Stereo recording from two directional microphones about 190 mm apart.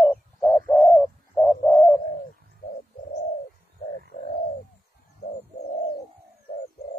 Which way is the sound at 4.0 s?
55° left (ahead or behind).